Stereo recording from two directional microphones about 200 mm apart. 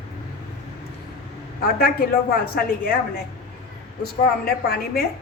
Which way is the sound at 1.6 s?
50° left (ahead or behind).